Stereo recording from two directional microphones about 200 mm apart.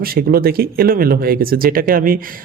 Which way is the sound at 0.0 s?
50° right (ahead or behind).